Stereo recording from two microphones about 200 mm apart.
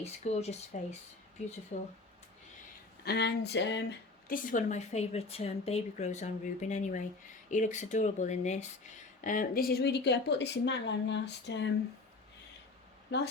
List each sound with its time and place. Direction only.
0.0 s a woman's voice: 30° left (ahead or behind)
3.0 s speech: 55° left (ahead or behind)
4.3 s a woman's voice: 40° left (ahead or behind); by 11.7 s 60° left (ahead or behind)
13.1 s speech: 60° left (ahead or behind)